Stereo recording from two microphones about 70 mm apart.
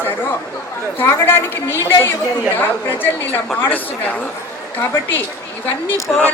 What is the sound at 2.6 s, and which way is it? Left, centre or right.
A woman's voice, left.